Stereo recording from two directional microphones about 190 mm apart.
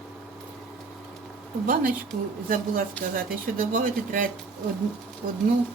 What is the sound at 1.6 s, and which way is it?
Speech, 45° right (ahead or behind).